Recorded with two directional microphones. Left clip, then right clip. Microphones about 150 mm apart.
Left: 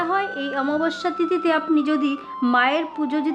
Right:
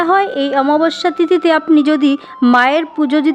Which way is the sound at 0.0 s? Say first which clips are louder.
Right 10 dB; 50° right (ahead or behind).